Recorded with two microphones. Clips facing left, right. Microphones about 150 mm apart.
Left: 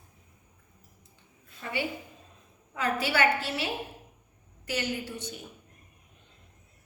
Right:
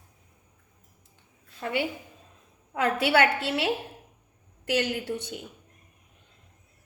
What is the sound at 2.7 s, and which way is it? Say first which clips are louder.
Speech: right 5 dB; 60° right (ahead or behind).